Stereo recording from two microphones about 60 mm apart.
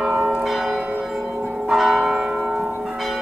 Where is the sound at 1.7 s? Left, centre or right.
Centre.